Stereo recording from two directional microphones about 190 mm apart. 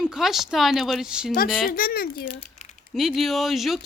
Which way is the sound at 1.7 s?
50° left (ahead or behind).